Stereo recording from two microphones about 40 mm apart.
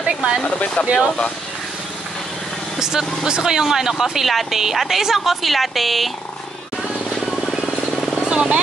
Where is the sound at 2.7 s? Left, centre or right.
Centre.